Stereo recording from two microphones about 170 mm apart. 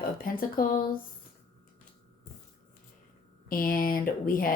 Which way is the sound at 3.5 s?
55° left (ahead or behind).